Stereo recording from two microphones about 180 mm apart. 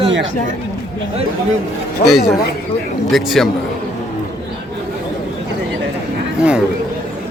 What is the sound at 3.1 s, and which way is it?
Speech, centre (ahead or behind).